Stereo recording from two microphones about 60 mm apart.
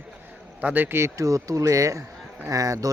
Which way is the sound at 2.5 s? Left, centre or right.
Right.